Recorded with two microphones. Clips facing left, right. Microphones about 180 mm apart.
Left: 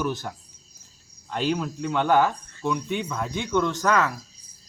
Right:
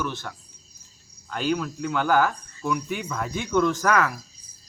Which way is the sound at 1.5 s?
25° left (ahead or behind).